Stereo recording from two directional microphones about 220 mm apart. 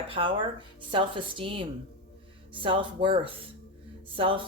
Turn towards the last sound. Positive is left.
turn(degrees=-25)  # may be behind; listen again after turning